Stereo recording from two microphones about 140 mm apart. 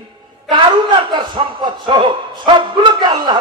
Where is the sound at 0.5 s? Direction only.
35° right (ahead or behind).